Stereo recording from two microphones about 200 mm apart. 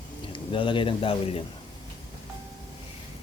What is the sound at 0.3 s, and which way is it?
A man's voice, 25° left (ahead or behind).